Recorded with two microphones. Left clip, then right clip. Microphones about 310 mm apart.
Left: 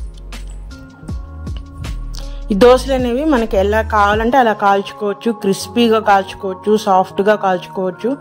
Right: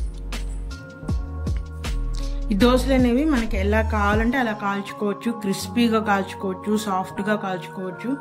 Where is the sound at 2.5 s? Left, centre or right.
Centre.